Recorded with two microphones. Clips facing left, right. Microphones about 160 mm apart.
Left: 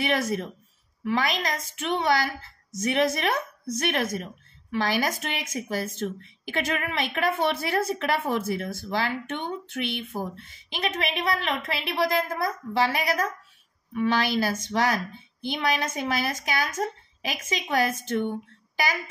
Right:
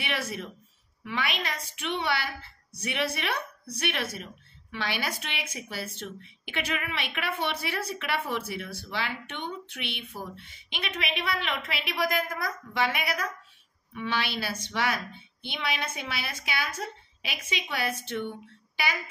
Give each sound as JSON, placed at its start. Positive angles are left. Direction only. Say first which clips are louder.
{"t": 0.0, "sound": "a woman's voice", "louder": "left 8 dB", "side_deg": 45}